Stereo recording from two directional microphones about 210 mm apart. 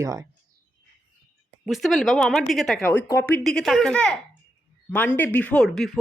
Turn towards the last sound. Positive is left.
turn(degrees=0)  # may be behind; listen again after turning